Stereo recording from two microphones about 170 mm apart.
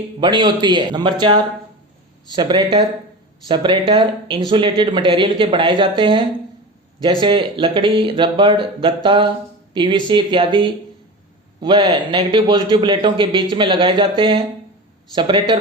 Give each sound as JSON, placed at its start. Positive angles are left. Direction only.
{"t": 0.2, "sound": "a man's voice", "side_deg": -25}